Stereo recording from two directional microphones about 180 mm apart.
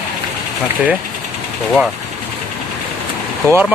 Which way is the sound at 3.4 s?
10° right (ahead or behind).